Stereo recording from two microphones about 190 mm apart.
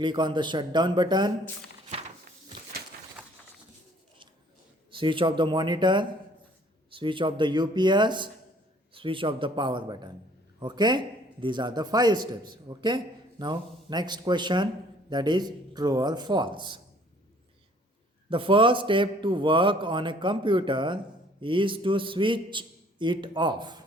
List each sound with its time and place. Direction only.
0.0 s a man's voice: 25° right (ahead or behind)
4.9 s a man's voice: 25° right (ahead or behind)
18.3 s a man's voice: 25° right (ahead or behind)